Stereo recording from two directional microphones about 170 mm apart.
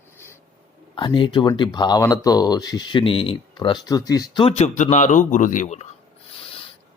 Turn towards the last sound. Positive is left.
turn(degrees=45)  # may be behind; listen again after turning